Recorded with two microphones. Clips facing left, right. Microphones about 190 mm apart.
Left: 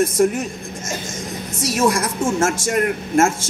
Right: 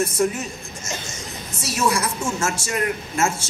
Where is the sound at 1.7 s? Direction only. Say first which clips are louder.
Left 3 dB; 50° left (ahead or behind).